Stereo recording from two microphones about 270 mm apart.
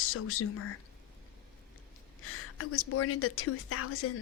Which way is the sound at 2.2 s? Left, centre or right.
Left.